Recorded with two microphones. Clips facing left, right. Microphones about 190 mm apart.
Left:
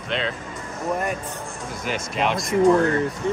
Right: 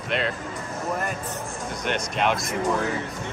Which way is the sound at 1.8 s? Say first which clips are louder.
Even; centre (ahead or behind).